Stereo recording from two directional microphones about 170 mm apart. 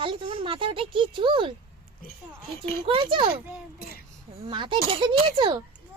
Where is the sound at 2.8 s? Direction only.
30° right (ahead or behind).